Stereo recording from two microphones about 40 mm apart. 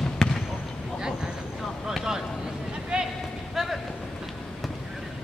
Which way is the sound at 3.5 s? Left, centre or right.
Centre.